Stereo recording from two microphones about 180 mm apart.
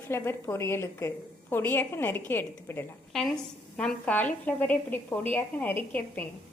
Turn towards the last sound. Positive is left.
turn(degrees=10)  # may be behind; listen again after turning